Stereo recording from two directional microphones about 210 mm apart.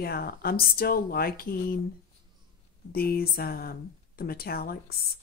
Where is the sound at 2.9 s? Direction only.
45° left (ahead or behind).